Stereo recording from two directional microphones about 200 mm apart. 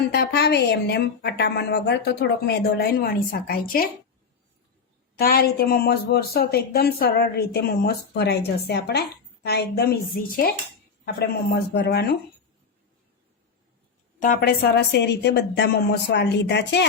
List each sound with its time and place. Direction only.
0.1 s a woman's voice: 55° left (ahead or behind)
5.1 s a woman's voice: 50° left (ahead or behind)
14.2 s a woman's voice: 45° left (ahead or behind)